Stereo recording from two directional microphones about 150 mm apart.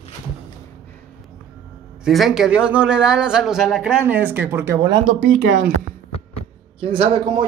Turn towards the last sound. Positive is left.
turn(degrees=-35)  # may be behind; listen again after turning